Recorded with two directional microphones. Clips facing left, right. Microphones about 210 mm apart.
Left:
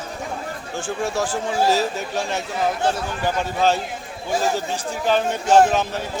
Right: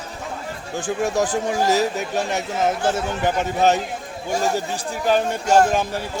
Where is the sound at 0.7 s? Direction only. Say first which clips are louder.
Right 3 dB; 15° right (ahead or behind).